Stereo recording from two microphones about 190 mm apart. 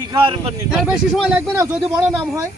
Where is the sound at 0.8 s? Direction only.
Centre (ahead or behind).